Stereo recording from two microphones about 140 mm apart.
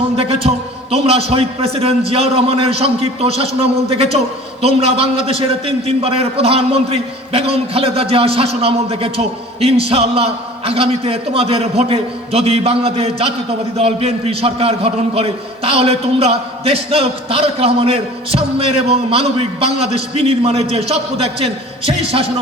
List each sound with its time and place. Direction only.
0.4 s a man's voice: 45° right (ahead or behind)